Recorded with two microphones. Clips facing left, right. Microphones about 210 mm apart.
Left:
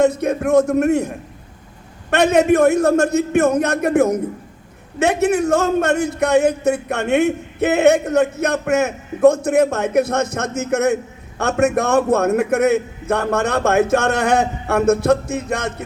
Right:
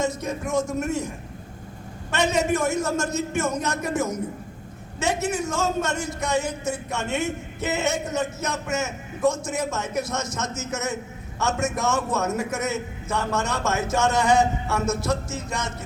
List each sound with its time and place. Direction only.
0.0 s a man's voice: 60° left (ahead or behind)